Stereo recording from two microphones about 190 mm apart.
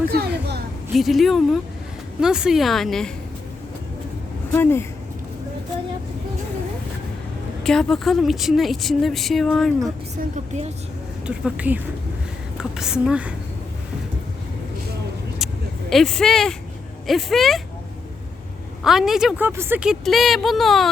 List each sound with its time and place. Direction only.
0.1 s a sound: 55° right (ahead or behind)
0.9 s a woman's voice: centre (ahead or behind)
4.5 s speech: 10° left (ahead or behind)
7.6 s a woman's voice: centre (ahead or behind)
10.2 s speech: 40° right (ahead or behind)
11.3 s a woman's voice: 5° right (ahead or behind)
15.9 s a woman's voice: centre (ahead or behind)
18.8 s a woman's voice: centre (ahead or behind)